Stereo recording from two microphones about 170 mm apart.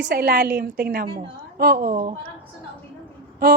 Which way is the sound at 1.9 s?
40° right (ahead or behind).